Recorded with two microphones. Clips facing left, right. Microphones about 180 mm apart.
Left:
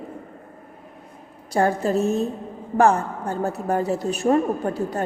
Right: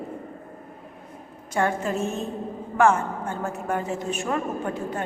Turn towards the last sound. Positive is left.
turn(degrees=35)  # may be behind; listen again after turning